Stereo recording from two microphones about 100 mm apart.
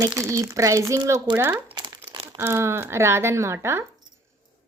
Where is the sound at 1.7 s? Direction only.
50° right (ahead or behind).